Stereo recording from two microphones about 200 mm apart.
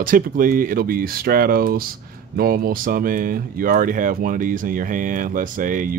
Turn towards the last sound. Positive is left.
turn(degrees=-40)  # may be behind; listen again after turning